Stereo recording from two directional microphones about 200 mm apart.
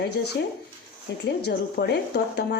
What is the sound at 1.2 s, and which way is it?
A woman's voice, 55° left (ahead or behind).